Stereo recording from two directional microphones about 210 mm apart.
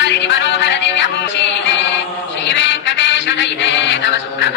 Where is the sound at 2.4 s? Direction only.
55° left (ahead or behind).